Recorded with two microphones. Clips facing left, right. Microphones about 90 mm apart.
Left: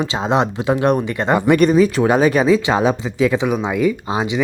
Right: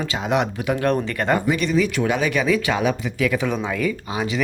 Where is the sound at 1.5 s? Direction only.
50° left (ahead or behind).